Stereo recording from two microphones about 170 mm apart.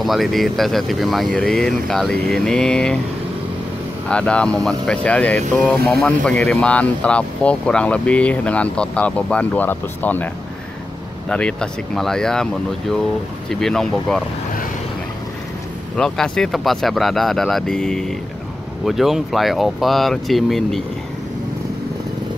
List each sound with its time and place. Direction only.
0.0 s speech: centre (ahead or behind)
4.1 s speech: 5° left (ahead or behind)
13.5 s speech: 5° left (ahead or behind)
16.0 s speech: 5° left (ahead or behind)